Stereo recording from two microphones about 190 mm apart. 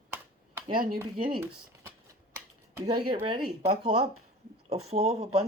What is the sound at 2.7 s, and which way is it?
Speech, 25° right (ahead or behind).